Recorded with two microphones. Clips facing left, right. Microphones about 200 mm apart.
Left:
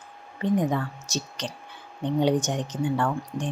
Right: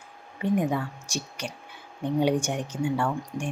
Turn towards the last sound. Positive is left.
turn(degrees=-10)  # may be behind; listen again after turning